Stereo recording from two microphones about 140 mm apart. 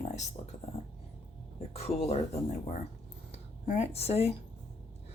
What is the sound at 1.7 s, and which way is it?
Speech, 50° left (ahead or behind).